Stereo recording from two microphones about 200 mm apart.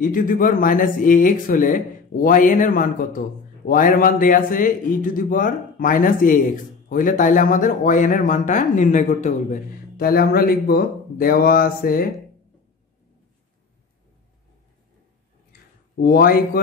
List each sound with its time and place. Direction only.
0.0 s a man's voice: 45° left (ahead or behind)
16.0 s a man's voice: 50° left (ahead or behind)